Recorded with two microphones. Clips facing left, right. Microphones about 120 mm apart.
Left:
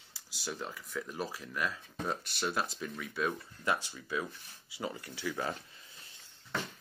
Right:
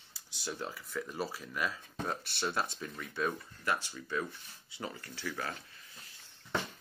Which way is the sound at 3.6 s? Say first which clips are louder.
Left 1 dB; 15° left (ahead or behind).